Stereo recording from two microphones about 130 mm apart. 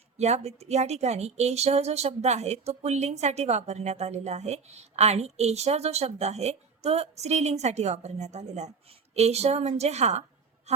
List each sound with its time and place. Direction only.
0.2 s speech: 60° right (ahead or behind)
10.7 s music: 55° right (ahead or behind)